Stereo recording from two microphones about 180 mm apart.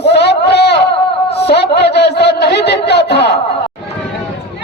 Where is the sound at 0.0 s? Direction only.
70° left (ahead or behind).